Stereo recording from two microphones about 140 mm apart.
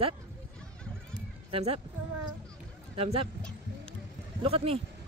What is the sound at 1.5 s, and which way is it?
Speech, 45° right (ahead or behind).